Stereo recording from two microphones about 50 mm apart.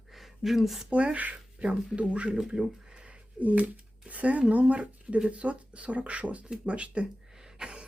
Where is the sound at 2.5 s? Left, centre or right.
Centre.